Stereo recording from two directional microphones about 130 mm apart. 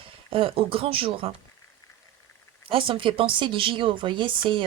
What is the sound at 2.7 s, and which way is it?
Speech, 40° right (ahead or behind).